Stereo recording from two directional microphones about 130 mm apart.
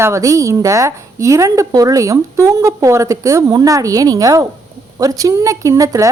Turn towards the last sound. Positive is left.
turn(degrees=-25)  # may be behind; listen again after turning